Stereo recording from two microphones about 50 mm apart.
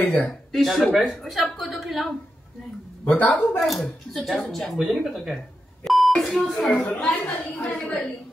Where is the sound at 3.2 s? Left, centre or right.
Left.